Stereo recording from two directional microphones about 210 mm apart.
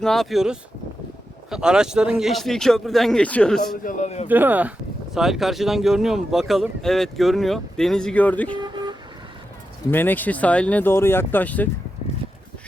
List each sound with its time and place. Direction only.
0.0 s speech: centre (ahead or behind)
3.8 s a man's voice: 35° left (ahead or behind)
4.3 s speech: 10° right (ahead or behind); by 8.5 s 5° left (ahead or behind)
8.5 s vehicle: 20° right (ahead or behind)
9.9 s speech: 10° left (ahead or behind)